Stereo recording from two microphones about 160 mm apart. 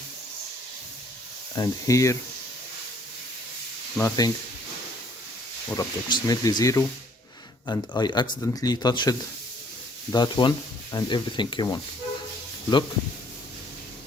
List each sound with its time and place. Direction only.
1.5 s speech: 20° left (ahead or behind)
3.9 s speech: 15° left (ahead or behind)
5.7 s speech: 25° left (ahead or behind)